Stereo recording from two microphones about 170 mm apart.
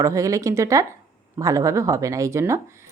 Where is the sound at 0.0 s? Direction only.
20° right (ahead or behind).